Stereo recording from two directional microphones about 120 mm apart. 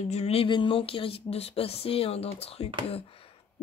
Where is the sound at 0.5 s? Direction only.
45° left (ahead or behind).